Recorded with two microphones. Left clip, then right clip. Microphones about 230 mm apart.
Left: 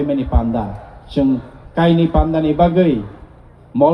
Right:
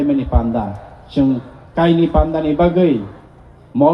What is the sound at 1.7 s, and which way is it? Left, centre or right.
Speech, left.